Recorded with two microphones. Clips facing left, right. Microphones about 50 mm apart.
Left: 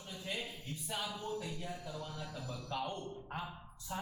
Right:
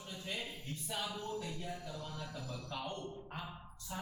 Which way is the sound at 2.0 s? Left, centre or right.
Centre.